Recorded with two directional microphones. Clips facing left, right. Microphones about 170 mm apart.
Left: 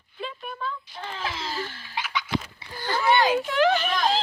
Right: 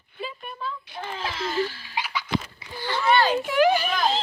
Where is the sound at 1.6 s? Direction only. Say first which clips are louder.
Right 3 dB; 50° left (ahead or behind).